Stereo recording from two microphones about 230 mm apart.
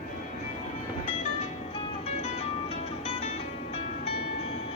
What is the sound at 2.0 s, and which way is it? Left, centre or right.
Music, left.